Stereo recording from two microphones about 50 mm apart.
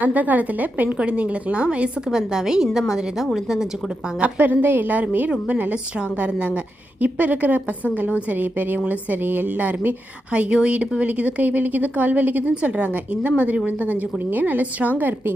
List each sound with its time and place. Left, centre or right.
0.0 s speech: right
0.9 s a woman's voice: right
2.0 s a woman's voice: centre
4.2 s a woman's voice: right
10.3 s speech: right